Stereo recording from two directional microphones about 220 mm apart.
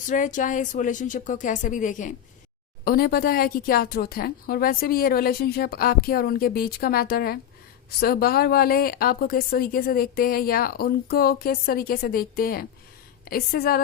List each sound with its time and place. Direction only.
0.1 s a woman's voice: 35° left (ahead or behind)